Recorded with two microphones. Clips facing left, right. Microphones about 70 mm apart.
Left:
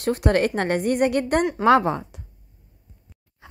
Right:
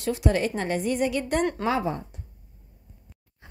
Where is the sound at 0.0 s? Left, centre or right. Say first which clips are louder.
Left 4 dB; left.